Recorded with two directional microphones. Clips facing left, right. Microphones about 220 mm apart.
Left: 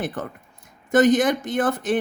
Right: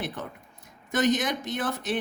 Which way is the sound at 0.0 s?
50° left (ahead or behind).